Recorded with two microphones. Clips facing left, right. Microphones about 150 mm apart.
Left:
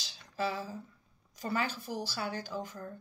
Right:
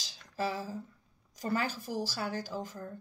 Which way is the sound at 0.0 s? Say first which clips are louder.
Even; 40° right (ahead or behind).